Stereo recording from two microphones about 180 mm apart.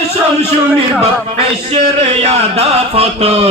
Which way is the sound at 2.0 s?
35° right (ahead or behind).